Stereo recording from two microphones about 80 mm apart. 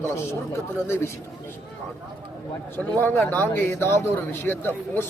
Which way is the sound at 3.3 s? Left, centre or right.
Left.